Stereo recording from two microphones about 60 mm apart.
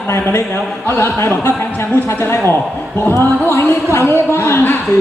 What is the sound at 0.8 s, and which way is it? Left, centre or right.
Speech, left.